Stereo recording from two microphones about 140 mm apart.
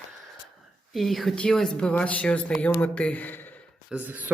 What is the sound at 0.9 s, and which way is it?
Speech, centre (ahead or behind).